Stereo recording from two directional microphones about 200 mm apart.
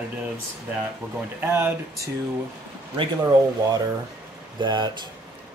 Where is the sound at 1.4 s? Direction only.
10° right (ahead or behind).